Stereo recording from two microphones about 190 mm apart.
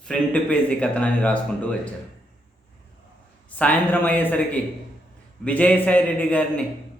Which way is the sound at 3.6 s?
5° left (ahead or behind).